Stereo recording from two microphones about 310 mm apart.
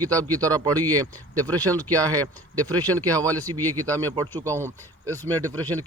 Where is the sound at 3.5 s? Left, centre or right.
Centre.